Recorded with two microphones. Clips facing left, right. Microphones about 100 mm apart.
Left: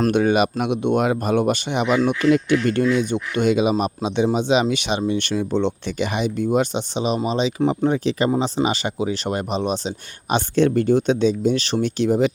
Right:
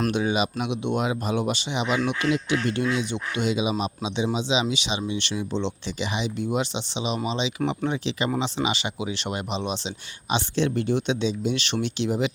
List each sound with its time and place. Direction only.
0.1 s speech: 55° left (ahead or behind)